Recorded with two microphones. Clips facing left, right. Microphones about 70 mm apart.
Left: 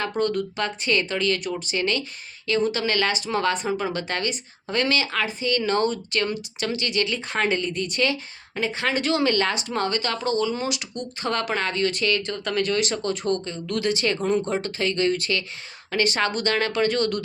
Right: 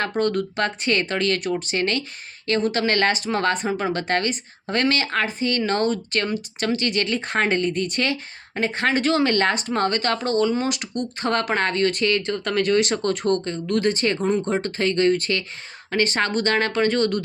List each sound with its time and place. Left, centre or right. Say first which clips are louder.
0.0 s speech: right 2 dB; right
12.8 s speech: right 3 dB; right
14.2 s speech: right 1 dB; centre
14.4 s speech: right 3 dB; right